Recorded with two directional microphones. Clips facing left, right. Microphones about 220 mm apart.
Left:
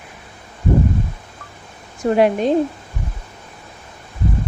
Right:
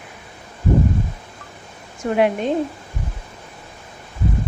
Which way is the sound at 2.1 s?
35° left (ahead or behind).